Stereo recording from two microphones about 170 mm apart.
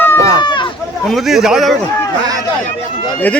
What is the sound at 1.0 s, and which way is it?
Speech, centre (ahead or behind).